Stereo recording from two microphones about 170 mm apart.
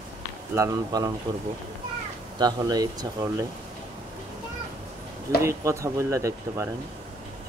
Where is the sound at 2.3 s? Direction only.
25° right (ahead or behind).